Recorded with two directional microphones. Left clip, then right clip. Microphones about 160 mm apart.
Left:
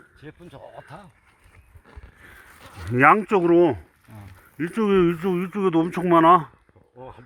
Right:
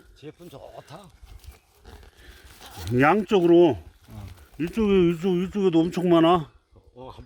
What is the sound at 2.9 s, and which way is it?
Speech, 20° right (ahead or behind).